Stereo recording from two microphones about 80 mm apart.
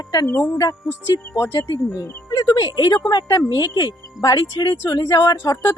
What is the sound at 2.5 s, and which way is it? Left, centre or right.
Speech, left.